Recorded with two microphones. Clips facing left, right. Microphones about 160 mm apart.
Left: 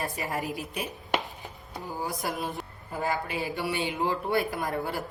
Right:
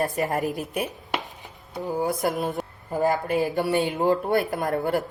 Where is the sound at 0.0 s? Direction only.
45° right (ahead or behind).